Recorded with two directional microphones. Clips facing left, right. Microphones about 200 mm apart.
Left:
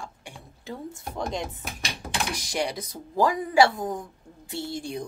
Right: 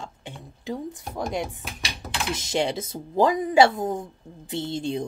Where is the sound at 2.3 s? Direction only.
25° right (ahead or behind).